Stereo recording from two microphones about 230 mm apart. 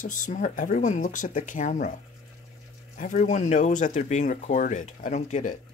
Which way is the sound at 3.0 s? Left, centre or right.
Left.